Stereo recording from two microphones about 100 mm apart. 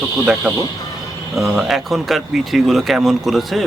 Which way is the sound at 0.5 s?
10° right (ahead or behind).